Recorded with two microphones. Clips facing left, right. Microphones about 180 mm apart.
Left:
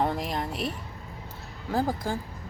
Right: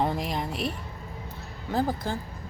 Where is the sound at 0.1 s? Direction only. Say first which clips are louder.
Even; centre (ahead or behind).